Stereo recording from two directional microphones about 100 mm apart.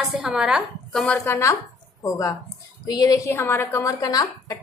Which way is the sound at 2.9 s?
35° left (ahead or behind).